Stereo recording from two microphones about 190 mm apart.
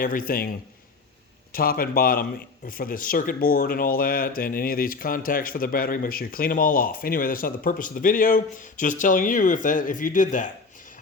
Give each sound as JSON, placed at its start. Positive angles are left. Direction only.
{"t": 0.0, "sound": "speech", "side_deg": 50}
{"t": 1.5, "sound": "speech", "side_deg": 50}